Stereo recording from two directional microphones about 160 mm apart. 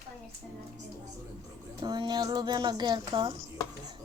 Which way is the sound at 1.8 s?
30° right (ahead or behind).